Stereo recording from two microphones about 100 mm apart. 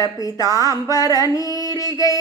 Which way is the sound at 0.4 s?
35° right (ahead or behind).